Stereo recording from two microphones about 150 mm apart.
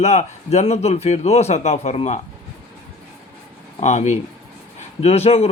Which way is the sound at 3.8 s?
50° left (ahead or behind).